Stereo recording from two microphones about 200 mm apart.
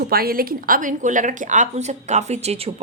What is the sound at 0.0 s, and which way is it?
A woman's voice, 50° right (ahead or behind).